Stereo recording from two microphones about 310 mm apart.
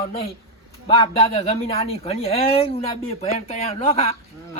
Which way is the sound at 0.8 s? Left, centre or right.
Centre.